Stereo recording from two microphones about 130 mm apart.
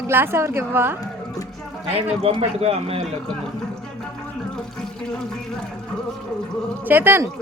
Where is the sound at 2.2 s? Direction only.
50° right (ahead or behind).